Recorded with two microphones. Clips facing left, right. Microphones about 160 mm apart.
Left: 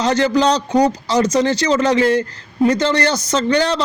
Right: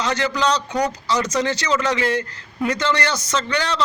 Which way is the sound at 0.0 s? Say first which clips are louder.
Left 6 dB; 35° left (ahead or behind).